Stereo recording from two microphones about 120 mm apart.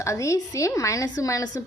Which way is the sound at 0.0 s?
25° left (ahead or behind).